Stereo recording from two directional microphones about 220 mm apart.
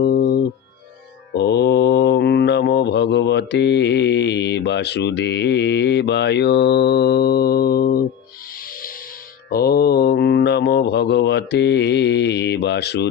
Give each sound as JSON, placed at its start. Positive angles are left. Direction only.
{"t": 0.0, "sound": "music", "side_deg": 45}
{"t": 1.3, "sound": "mantra", "side_deg": 50}
{"t": 9.5, "sound": "mantra", "side_deg": 45}